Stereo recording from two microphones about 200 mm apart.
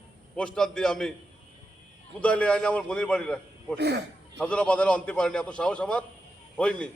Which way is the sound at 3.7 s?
55° right (ahead or behind).